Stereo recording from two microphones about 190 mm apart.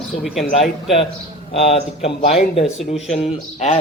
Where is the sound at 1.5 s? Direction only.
30° left (ahead or behind).